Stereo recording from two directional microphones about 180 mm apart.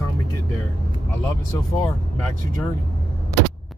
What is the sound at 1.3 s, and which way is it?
Speech, 20° left (ahead or behind).